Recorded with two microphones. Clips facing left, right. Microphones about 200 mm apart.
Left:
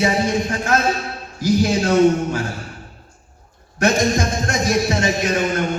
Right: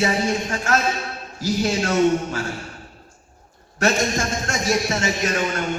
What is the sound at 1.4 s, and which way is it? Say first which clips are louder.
Speech: left 5 dB; 15° left (ahead or behind).